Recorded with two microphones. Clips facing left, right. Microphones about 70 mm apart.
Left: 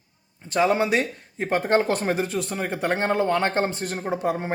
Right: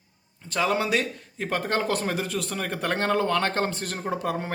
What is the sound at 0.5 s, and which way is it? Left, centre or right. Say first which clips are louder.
Speech: left 4 dB; left.